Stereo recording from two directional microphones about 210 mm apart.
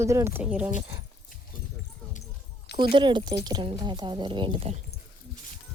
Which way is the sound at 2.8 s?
25° right (ahead or behind).